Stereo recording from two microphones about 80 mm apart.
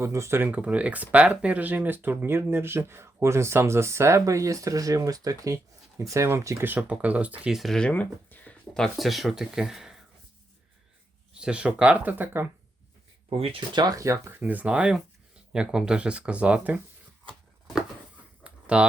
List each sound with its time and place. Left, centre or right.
0.0 s speech: right
6.7 s speech: centre
7.5 s speech: centre
7.8 s speech: centre
11.3 s speech: centre
13.8 s speech: right; by 16.8 s centre
18.4 s a sound: centre